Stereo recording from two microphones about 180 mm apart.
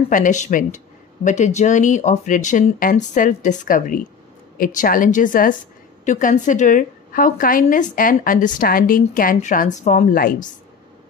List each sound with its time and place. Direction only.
0.1 s a woman's voice: 45° left (ahead or behind)